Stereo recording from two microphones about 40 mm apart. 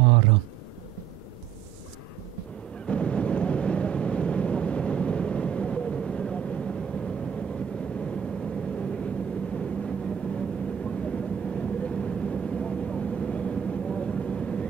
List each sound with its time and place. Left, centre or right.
2.9 s vehicle: left